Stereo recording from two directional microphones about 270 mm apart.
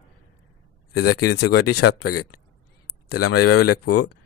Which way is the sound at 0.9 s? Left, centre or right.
Left.